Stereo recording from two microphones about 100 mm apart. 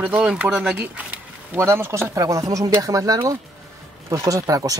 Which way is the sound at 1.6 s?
25° right (ahead or behind).